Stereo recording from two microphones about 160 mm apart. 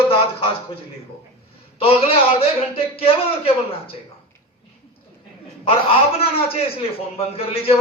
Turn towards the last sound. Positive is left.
turn(degrees=35)  # may be behind; listen again after turning